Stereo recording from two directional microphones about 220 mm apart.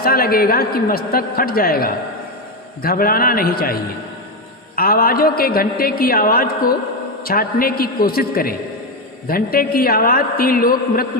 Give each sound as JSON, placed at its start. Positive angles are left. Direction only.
{"t": 0.0, "sound": "a man's voice", "side_deg": 40}